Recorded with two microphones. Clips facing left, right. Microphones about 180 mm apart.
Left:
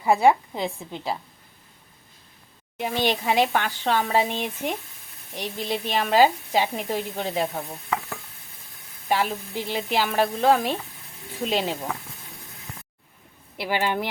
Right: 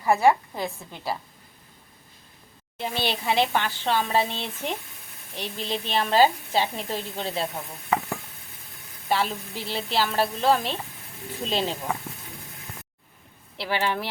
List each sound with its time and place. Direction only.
0.0 s speech: 15° left (ahead or behind)
2.7 s speech: 15° left (ahead or behind)
9.0 s speech: 10° left (ahead or behind)
13.6 s speech: 15° left (ahead or behind)